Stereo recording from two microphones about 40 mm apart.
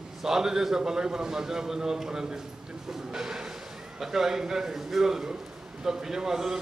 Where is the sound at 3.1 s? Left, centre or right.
Centre.